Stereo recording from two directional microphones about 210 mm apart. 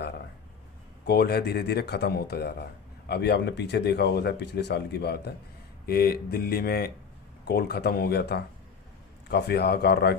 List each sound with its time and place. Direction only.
1.0 s speech: 50° left (ahead or behind)